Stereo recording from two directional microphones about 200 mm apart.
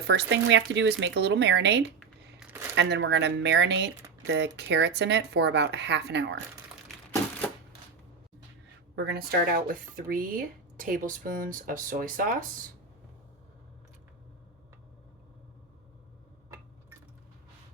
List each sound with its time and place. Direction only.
0.1 s speech: 60° right (ahead or behind)
2.0 s shuffling cards: 5° right (ahead or behind)
2.7 s speech: 60° right (ahead or behind)
9.0 s speech: 55° right (ahead or behind)